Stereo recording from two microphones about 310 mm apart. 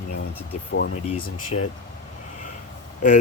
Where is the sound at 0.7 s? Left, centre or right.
Left.